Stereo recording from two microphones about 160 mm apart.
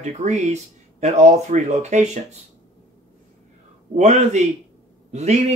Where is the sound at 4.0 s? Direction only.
45° right (ahead or behind).